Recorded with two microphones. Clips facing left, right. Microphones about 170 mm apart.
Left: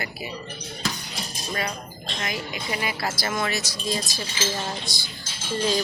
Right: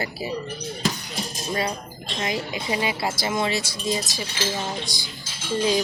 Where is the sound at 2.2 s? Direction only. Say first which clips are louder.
Right 4 dB; 30° right (ahead or behind).